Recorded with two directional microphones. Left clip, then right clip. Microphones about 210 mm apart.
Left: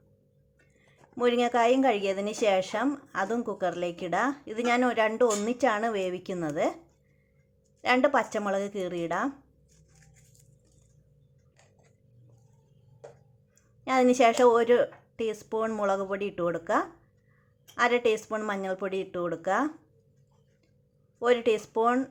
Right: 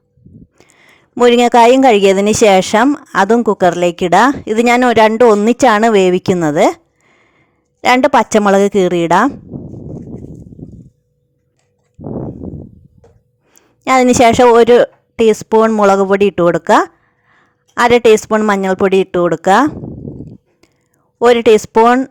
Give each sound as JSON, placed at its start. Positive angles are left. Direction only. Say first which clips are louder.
{"t": 0.6, "sound": "speech", "louder": "right 15 dB", "side_deg": -50}
{"t": 7.8, "sound": "speech", "louder": "right 14 dB", "side_deg": -50}
{"t": 13.5, "sound": "speech", "louder": "right 16 dB", "side_deg": -45}
{"t": 21.2, "sound": "speech", "louder": "right 17 dB", "side_deg": -50}